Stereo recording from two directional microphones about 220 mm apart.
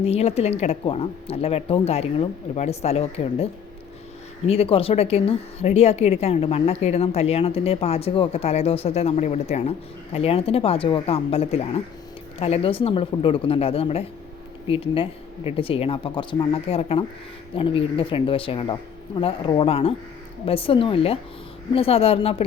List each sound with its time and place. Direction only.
0.0 s speech: 30° left (ahead or behind)